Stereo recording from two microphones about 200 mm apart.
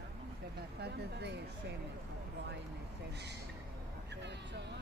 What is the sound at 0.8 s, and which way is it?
Speech, 55° right (ahead or behind).